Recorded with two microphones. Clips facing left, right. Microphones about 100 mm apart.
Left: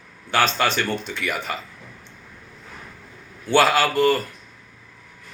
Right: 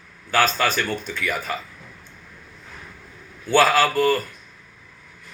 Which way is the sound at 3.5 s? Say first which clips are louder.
Even; 20° left (ahead or behind).